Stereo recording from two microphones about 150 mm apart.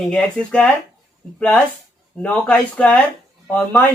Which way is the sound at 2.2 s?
10° left (ahead or behind).